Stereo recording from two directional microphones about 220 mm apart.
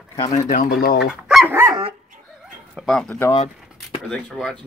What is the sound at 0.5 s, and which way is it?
Speech, 40° left (ahead or behind).